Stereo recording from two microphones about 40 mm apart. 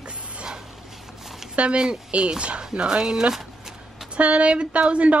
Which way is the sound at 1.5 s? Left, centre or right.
Right.